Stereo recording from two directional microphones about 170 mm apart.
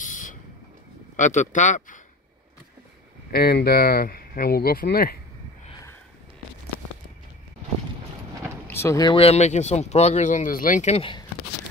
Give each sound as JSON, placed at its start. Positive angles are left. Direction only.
{"t": 0.0, "sound": "a sound", "side_deg": 50}
{"t": 1.1, "sound": "a man's voice", "side_deg": 45}
{"t": 3.3, "sound": "speech", "side_deg": 65}
{"t": 8.6, "sound": "vehicle", "side_deg": 15}
{"t": 9.1, "sound": "speech", "side_deg": 35}